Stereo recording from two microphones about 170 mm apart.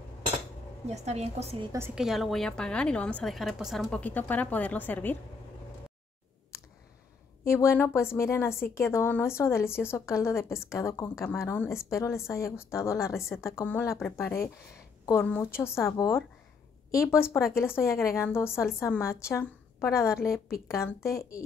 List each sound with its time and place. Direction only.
0.8 s a woman's voice: 40° right (ahead or behind)
2.0 s a woman's voice: centre (ahead or behind)
7.4 s a woman's voice: 15° left (ahead or behind)